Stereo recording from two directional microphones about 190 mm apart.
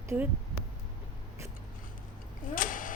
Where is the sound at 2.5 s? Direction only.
45° left (ahead or behind).